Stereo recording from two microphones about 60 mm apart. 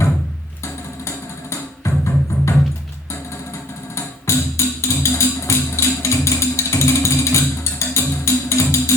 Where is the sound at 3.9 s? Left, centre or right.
Left.